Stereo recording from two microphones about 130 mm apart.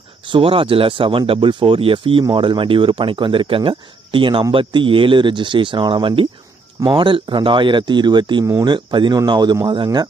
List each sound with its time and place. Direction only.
0.3 s speech: 45° right (ahead or behind)